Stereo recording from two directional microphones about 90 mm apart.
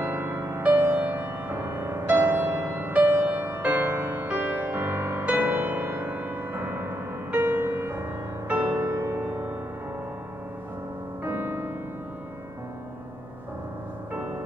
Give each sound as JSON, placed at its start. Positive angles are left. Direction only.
{"t": 0.0, "sound": "music", "side_deg": -25}
{"t": 11.2, "sound": "music", "side_deg": -20}